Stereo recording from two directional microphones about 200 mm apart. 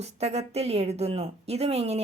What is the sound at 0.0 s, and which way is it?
Speech, 30° right (ahead or behind).